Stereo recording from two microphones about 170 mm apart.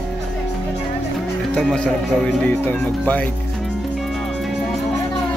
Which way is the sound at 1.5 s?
5° left (ahead or behind).